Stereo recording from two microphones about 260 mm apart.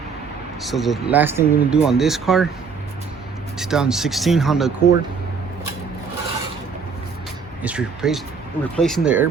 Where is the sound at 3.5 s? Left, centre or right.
Centre.